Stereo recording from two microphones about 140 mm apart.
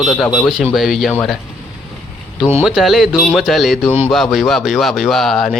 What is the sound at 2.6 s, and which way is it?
A man's voice, centre (ahead or behind).